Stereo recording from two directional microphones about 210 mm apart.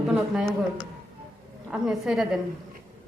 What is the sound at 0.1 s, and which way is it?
Speech, 5° right (ahead or behind).